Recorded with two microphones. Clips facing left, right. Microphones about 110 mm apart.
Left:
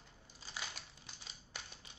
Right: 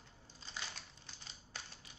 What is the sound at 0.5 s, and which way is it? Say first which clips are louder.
Crushing: left 1 dB; 15° left (ahead or behind).